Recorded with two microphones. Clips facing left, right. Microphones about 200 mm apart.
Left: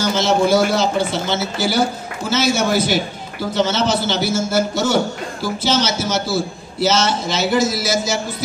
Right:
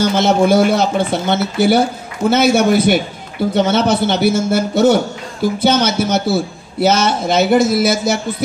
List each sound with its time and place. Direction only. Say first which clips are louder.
0.0 s a man's voice: right 4 dB; 55° right (ahead or behind)